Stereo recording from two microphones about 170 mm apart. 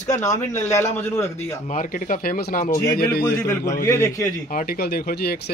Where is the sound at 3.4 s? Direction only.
15° left (ahead or behind).